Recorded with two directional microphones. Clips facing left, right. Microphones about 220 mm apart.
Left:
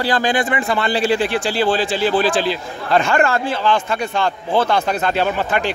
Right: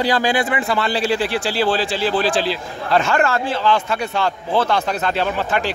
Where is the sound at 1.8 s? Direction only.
50° left (ahead or behind).